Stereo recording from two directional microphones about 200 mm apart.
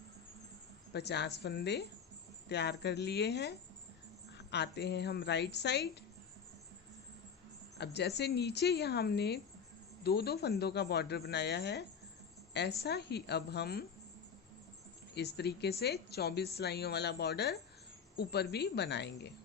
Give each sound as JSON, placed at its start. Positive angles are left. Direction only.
{"t": 0.9, "sound": "speech", "side_deg": 55}
{"t": 7.8, "sound": "speech", "side_deg": 55}
{"t": 15.1, "sound": "speech", "side_deg": 55}